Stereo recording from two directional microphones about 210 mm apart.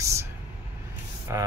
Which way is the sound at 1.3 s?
15° right (ahead or behind).